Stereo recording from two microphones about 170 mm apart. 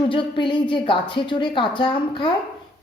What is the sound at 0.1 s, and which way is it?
A woman's voice, 30° left (ahead or behind).